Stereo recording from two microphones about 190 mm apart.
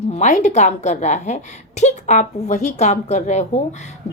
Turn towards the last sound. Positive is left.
turn(degrees=40)  # may be behind; listen again after turning